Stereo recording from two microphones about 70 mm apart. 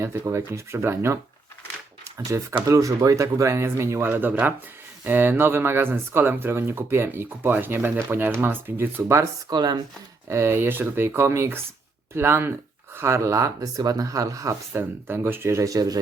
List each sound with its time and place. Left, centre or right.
0.0 s speech: right
9.5 s speech: right
10.2 s speech: right
14.7 s speech: right